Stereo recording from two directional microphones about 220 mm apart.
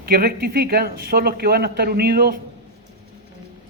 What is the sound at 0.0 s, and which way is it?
Speech, 40° right (ahead or behind).